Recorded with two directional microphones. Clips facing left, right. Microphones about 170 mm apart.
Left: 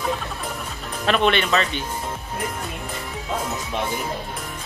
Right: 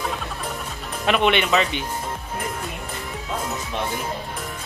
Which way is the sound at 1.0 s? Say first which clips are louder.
Even; 10° right (ahead or behind).